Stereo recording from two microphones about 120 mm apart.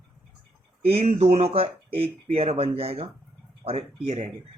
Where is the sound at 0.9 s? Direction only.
60° right (ahead or behind).